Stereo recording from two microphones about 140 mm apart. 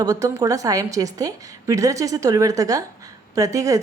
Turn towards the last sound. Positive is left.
turn(degrees=-25)  # may be behind; listen again after turning